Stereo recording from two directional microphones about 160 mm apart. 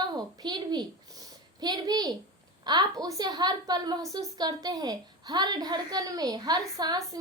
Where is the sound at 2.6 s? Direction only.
25° right (ahead or behind).